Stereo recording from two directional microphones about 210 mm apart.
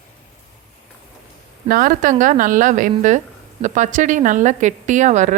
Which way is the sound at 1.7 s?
40° right (ahead or behind).